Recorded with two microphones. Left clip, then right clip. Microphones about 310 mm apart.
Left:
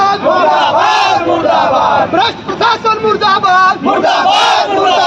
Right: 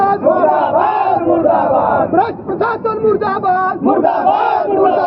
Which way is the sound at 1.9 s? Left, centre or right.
Centre.